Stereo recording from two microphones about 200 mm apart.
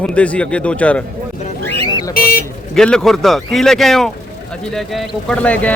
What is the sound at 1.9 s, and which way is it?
Car alarm, 20° left (ahead or behind).